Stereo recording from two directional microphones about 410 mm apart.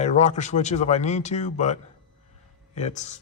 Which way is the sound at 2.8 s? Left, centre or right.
Centre.